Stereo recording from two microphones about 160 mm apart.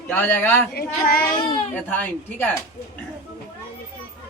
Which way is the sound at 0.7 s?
70° left (ahead or behind).